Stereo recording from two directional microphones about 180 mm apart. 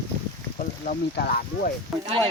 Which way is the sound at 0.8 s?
55° left (ahead or behind).